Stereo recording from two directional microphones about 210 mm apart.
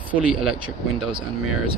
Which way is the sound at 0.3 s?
5° right (ahead or behind).